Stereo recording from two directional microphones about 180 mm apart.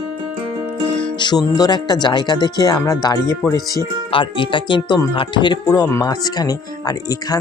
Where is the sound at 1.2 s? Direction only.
25° left (ahead or behind).